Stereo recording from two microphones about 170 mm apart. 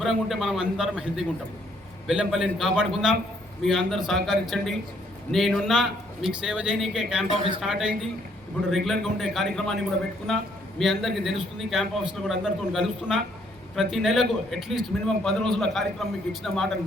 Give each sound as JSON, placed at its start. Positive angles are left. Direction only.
{"t": 0.0, "sound": "a man's voice", "side_deg": 0}
{"t": 10.8, "sound": "a man's voice", "side_deg": 0}